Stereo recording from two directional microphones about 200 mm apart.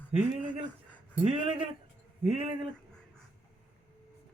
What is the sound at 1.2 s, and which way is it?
Speech, 30° right (ahead or behind).